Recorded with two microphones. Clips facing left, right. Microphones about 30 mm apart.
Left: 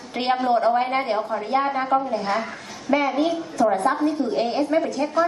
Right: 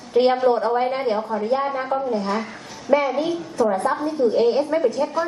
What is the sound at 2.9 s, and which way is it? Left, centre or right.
Speech, centre.